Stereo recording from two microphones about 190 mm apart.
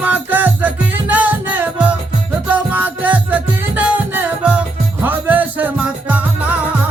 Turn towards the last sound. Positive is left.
turn(degrees=-5)  # may be behind; listen again after turning